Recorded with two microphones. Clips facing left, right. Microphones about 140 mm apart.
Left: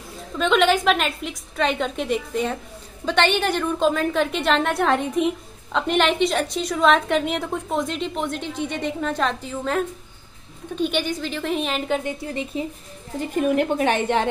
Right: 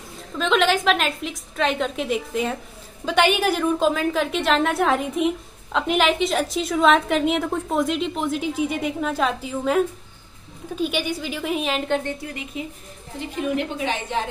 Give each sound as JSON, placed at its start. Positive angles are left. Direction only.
{"t": 0.4, "sound": "a woman's voice", "side_deg": 0}
{"t": 12.3, "sound": "speech", "side_deg": 30}
{"t": 13.4, "sound": "a woman's voice", "side_deg": 50}